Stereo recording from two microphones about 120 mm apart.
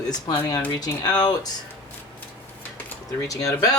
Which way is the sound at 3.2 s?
30° left (ahead or behind).